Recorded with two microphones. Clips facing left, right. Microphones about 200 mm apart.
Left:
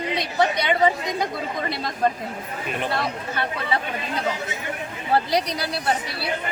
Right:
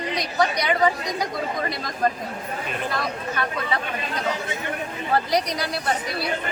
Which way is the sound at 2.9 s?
30° left (ahead or behind).